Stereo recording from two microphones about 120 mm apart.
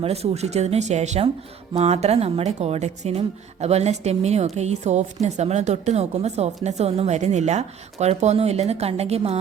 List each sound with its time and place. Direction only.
0.0 s speech: 60° right (ahead or behind)
1.7 s a woman's voice: 60° right (ahead or behind)